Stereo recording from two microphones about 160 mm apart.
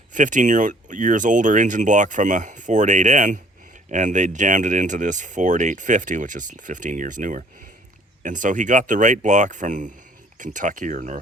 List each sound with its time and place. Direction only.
0.1 s speech: 55° right (ahead or behind)